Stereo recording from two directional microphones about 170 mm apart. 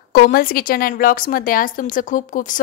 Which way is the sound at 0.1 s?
55° left (ahead or behind).